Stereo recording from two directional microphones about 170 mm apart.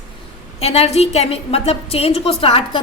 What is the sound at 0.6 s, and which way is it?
A woman's voice, 35° left (ahead or behind).